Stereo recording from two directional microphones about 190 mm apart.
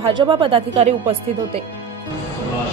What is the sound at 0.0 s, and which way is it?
Speech, 25° right (ahead or behind).